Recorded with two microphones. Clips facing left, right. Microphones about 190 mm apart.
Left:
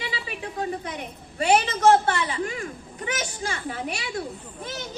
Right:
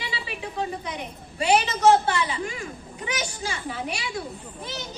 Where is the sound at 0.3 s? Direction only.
50° left (ahead or behind).